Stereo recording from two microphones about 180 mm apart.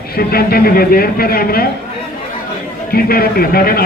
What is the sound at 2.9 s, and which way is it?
Speech, 55° left (ahead or behind).